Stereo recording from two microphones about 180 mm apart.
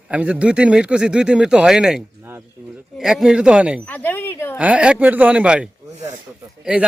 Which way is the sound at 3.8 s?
10° left (ahead or behind).